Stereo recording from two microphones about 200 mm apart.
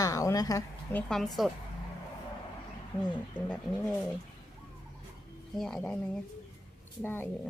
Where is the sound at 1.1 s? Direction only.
Centre (ahead or behind).